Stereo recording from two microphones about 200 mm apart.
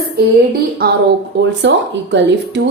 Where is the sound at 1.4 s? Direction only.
60° right (ahead or behind).